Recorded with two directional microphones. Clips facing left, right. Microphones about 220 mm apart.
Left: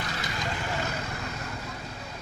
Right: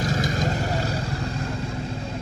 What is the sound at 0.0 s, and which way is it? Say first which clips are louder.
Vehicle: right 9 dB; 40° right (ahead or behind).